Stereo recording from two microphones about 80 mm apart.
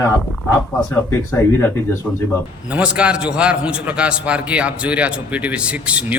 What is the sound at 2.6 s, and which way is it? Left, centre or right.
A man's voice, centre.